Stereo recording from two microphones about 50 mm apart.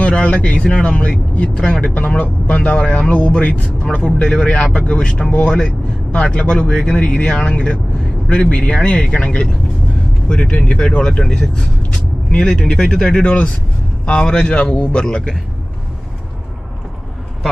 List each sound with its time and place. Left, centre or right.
0.0 s speech: left
8.3 s speech: centre